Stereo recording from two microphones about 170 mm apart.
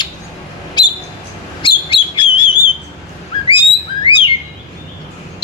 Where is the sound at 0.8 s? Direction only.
25° left (ahead or behind).